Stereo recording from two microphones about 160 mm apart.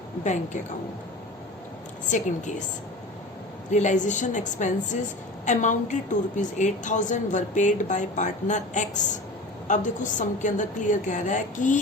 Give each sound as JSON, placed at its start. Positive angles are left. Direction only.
{"t": 2.0, "sound": "a woman's voice", "side_deg": 50}
{"t": 3.7, "sound": "a woman's voice", "side_deg": 50}